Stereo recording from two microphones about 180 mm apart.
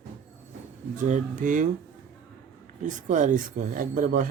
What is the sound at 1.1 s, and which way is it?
Speech, 45° right (ahead or behind).